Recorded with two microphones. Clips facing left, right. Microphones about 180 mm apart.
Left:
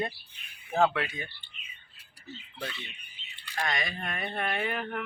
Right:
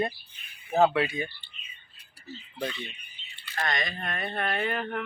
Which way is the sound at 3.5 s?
10° left (ahead or behind).